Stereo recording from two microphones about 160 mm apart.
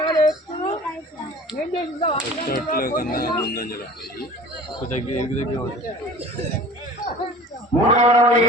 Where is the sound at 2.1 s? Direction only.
55° left (ahead or behind).